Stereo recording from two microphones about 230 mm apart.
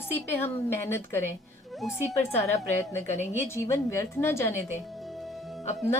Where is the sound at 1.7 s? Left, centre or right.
Centre.